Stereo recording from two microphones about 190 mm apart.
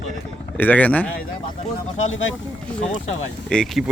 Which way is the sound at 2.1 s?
90° left.